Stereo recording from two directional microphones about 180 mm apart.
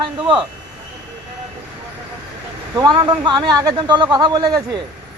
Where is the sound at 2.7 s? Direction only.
20° right (ahead or behind).